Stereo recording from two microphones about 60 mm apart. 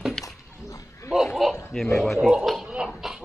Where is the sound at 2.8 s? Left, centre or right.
Centre.